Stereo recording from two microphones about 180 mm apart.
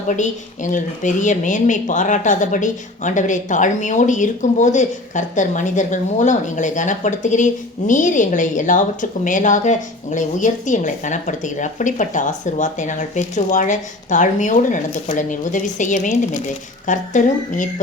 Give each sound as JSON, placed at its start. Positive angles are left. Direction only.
{"t": 0.2, "sound": "speech", "side_deg": 45}